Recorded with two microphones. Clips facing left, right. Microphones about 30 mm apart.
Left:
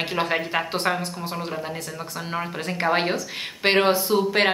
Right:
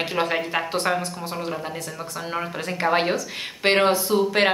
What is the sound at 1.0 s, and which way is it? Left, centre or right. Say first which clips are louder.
Speech: right 1 dB; centre.